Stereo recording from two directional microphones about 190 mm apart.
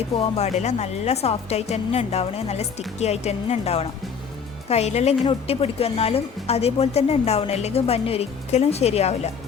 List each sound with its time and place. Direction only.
0.2 s a woman's voice: 35° left (ahead or behind)